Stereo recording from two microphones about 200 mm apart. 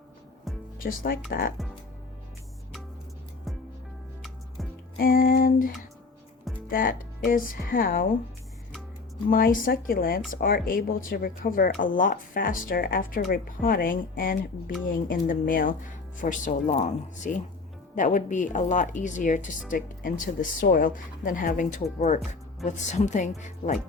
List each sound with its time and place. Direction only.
0.8 s speech: 45° left (ahead or behind)
4.2 s music: centre (ahead or behind)
4.9 s speech: 45° left (ahead or behind)
9.3 s a woman's voice: 45° left (ahead or behind)